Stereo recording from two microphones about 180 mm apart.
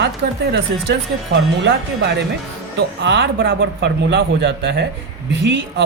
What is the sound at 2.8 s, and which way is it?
A woman's voice, 75° right (ahead or behind).